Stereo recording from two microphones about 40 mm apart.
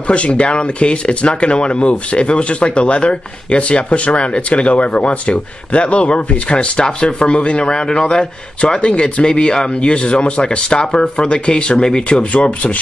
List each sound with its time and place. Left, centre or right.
0.1 s speech: left
12.2 s speech: left